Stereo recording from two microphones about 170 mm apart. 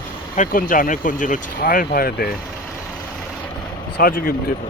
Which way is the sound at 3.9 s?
65° left (ahead or behind).